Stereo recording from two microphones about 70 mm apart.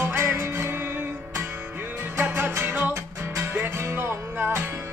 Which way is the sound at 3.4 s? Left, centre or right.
Right.